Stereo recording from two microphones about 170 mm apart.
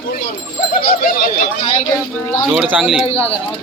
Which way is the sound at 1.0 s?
55° left (ahead or behind).